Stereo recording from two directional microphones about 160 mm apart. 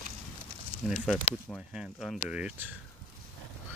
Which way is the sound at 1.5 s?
5° right (ahead or behind).